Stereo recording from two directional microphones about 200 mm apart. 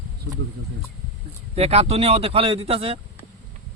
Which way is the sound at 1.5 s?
30° right (ahead or behind).